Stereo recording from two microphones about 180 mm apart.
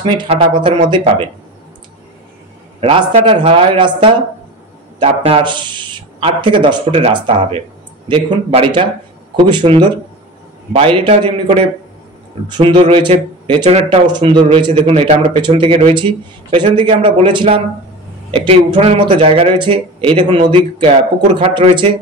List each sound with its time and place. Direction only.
0.0 s speech: 30° right (ahead or behind)
2.8 s speech: 30° right (ahead or behind)
14.7 s speech: 40° right (ahead or behind)